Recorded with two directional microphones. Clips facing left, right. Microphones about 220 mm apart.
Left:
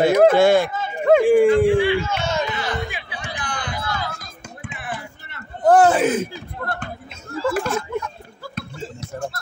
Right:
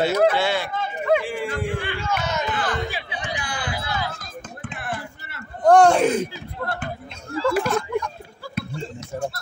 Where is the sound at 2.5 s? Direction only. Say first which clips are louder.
Even; 50° right (ahead or behind).